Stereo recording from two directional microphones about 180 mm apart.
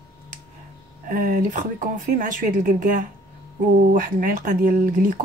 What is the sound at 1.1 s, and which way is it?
Speech, 50° right (ahead or behind).